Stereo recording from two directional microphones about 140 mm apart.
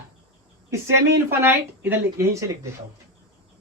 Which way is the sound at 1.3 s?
15° right (ahead or behind).